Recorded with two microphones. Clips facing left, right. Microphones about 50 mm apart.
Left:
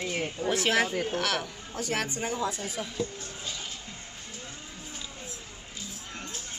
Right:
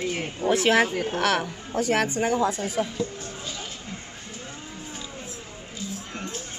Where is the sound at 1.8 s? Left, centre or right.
Right.